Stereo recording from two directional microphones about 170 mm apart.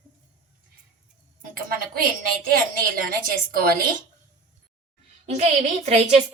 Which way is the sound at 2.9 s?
60° right (ahead or behind).